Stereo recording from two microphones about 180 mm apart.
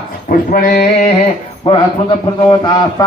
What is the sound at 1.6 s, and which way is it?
A man's voice, 25° left (ahead or behind).